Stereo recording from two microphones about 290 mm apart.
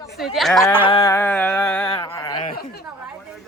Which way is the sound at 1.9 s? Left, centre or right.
Centre.